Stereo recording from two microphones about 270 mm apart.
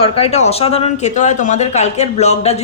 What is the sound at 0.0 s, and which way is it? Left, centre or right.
A woman's voice, left.